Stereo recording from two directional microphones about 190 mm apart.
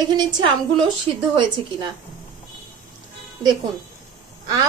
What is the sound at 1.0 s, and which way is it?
Speech, 25° right (ahead or behind).